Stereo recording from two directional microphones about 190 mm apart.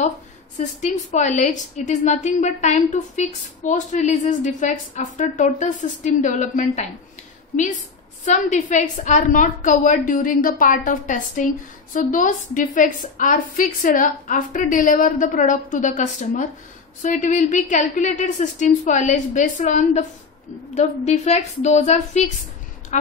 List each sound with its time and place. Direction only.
0.6 s a woman's voice: 40° left (ahead or behind)
8.3 s a woman's voice: 40° left (ahead or behind)